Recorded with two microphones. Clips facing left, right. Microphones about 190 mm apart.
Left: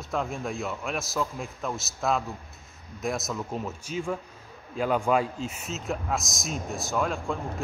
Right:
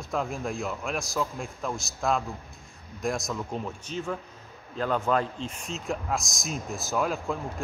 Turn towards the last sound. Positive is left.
turn(degrees=0)  # may be behind; listen again after turning